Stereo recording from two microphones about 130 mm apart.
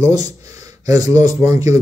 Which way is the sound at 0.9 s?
25° right (ahead or behind).